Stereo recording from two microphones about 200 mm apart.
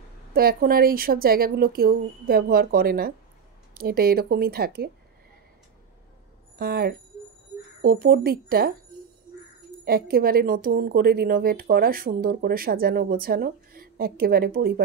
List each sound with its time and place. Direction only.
0.3 s a woman's voice: 50° right (ahead or behind)
6.6 s a woman's voice: 50° right (ahead or behind)
9.8 s a woman's voice: 50° right (ahead or behind)